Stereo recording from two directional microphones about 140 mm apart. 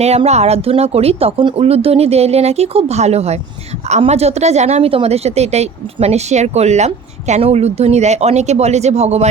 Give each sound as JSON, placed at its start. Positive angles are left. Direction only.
{"t": 0.0, "sound": "a woman's voice", "side_deg": -50}